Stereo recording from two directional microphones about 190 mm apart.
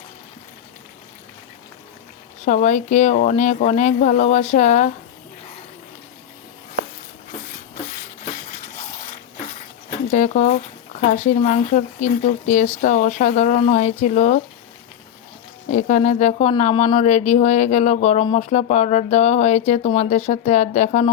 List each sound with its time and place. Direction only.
2.4 s speech: 40° left (ahead or behind)
8.4 s a sound: 45° left (ahead or behind)
10.1 s speech: 40° left (ahead or behind)
15.7 s speech: 40° left (ahead or behind)